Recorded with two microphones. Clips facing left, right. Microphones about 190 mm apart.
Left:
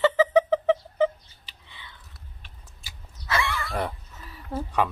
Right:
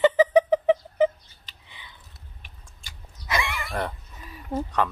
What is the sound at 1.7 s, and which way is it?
Whispering, 15° right (ahead or behind).